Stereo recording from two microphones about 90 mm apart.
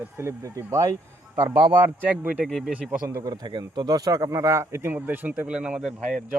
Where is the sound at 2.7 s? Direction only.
15° right (ahead or behind).